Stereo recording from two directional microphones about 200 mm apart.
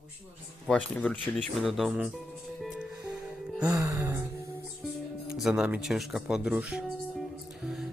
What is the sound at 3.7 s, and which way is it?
Music, 15° right (ahead or behind).